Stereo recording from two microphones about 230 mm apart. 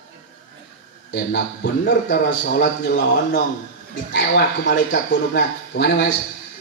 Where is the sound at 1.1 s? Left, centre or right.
Left.